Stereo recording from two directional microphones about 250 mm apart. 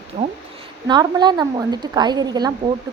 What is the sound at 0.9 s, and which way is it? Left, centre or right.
A woman's voice, centre.